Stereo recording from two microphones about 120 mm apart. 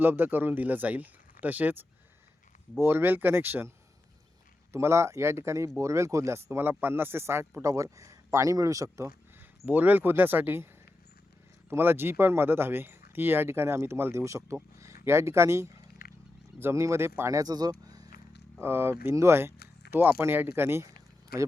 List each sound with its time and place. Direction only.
0.0 s speech: 15° right (ahead or behind)
4.7 s speech: 25° right (ahead or behind)
9.6 s speech: 15° right (ahead or behind)
11.7 s speech: 20° right (ahead or behind)
18.6 s speech: 20° right (ahead or behind)